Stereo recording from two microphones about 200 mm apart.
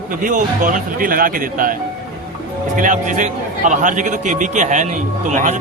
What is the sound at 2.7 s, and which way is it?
A man's voice, 40° right (ahead or behind).